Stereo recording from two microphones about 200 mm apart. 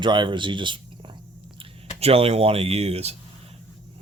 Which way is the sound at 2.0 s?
30° right (ahead or behind).